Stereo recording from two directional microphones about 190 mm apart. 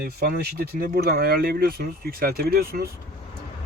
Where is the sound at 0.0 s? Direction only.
55° right (ahead or behind).